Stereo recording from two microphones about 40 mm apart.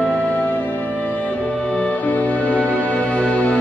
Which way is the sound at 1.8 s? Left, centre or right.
Left.